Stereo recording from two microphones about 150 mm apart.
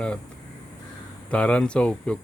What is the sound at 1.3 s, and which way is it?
Mantra, 5° left (ahead or behind).